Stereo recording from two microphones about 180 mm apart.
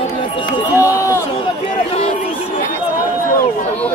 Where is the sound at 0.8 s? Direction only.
15° left (ahead or behind).